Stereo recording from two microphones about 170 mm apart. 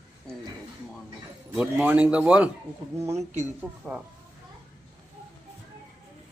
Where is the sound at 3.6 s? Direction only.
10° right (ahead or behind).